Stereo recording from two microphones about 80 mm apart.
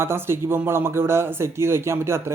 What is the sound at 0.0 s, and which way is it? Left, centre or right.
Speech, right.